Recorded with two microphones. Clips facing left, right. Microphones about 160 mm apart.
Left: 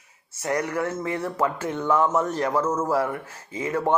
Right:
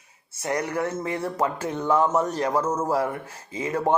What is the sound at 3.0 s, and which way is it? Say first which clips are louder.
Speech: even; 30° right (ahead or behind).